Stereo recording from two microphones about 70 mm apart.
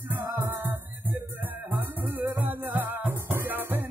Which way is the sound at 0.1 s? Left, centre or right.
Right.